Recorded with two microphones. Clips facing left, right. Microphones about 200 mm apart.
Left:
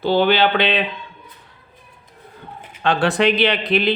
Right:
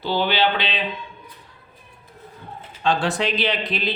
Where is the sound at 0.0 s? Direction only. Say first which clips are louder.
Left 5 dB; 55° left (ahead or behind).